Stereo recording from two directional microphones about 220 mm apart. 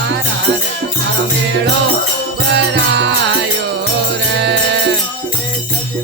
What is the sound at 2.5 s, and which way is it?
Music, 50° right (ahead or behind).